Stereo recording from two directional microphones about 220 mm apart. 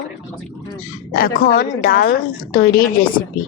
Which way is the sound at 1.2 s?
40° left (ahead or behind).